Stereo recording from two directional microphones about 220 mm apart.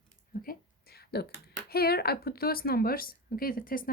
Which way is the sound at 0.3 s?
45° left (ahead or behind).